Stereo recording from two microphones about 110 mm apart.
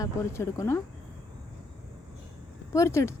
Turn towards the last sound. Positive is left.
turn(degrees=25)  # may be behind; listen again after turning